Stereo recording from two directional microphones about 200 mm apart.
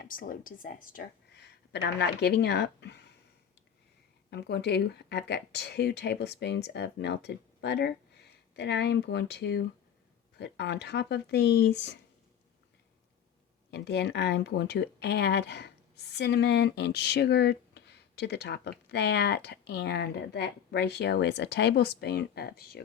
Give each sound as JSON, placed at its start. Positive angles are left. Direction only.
{"t": 0.0, "sound": "speech", "side_deg": 45}
{"t": 4.3, "sound": "speech", "side_deg": 55}
{"t": 13.7, "sound": "speech", "side_deg": 55}